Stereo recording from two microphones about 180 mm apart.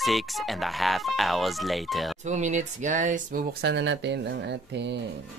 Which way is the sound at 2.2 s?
40° right (ahead or behind).